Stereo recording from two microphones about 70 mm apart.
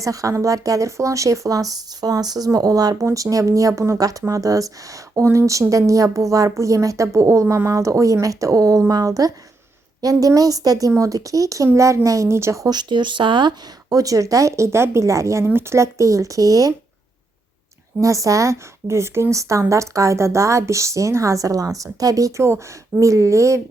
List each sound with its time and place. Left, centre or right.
0.0 s a woman's voice: right
12.6 s a woman's voice: right
15.4 s a woman's voice: right
18.0 s a woman's voice: right